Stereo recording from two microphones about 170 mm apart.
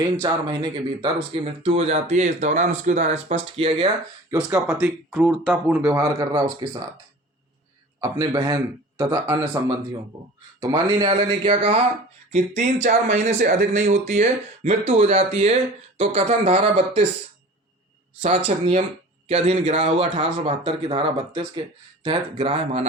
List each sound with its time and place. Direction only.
0.2 s speech: 25° right (ahead or behind)
1.6 s a man's voice: 40° right (ahead or behind)
4.3 s speech: 20° right (ahead or behind)
8.0 s speech: 20° right (ahead or behind)
10.6 s speech: 25° right (ahead or behind)
12.3 s a man's voice: 45° right (ahead or behind)
18.2 s a man's voice: 40° right (ahead or behind)